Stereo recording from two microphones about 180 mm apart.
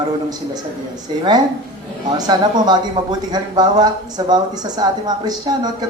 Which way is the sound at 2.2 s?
25° right (ahead or behind).